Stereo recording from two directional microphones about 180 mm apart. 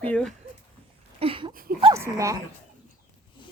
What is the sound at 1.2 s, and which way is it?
Speech, 30° right (ahead or behind).